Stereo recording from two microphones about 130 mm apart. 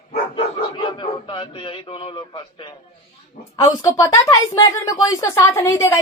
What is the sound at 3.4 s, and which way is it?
Speech, 85° left.